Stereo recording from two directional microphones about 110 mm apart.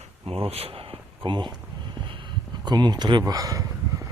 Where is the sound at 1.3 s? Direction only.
45° right (ahead or behind).